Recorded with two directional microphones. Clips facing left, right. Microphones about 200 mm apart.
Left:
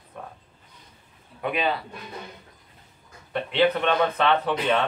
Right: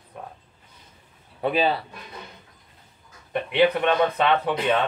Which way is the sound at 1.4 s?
30° right (ahead or behind).